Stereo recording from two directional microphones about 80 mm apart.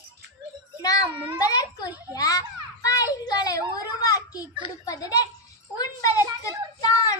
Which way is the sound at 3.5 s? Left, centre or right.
Left.